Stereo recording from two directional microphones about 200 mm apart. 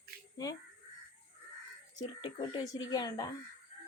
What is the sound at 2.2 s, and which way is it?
Speech, 25° left (ahead or behind).